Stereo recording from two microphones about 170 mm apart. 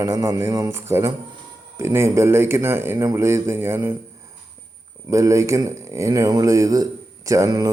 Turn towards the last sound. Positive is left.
turn(degrees=-20)  # may be behind; listen again after turning